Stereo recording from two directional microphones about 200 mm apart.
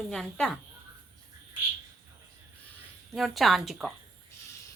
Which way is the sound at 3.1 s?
Centre (ahead or behind).